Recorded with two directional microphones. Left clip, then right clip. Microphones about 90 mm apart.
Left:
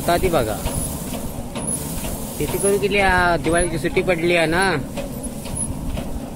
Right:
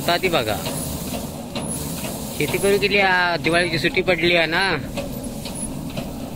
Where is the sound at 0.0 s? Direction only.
15° left (ahead or behind).